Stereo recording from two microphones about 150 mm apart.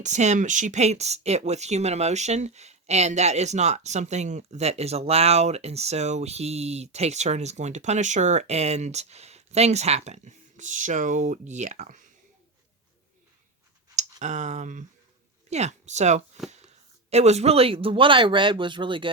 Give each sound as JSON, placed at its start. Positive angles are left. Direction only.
{"t": 0.0, "sound": "speech", "side_deg": -50}
{"t": 13.9, "sound": "speech", "side_deg": -50}